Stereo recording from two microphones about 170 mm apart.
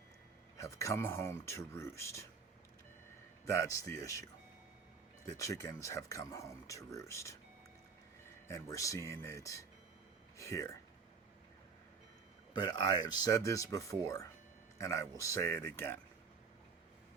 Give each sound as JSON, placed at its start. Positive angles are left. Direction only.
{"t": 0.5, "sound": "speech", "side_deg": 20}
{"t": 3.5, "sound": "speech", "side_deg": 20}
{"t": 5.2, "sound": "speech", "side_deg": 20}
{"t": 8.4, "sound": "speech", "side_deg": 20}
{"t": 12.5, "sound": "speech", "side_deg": 25}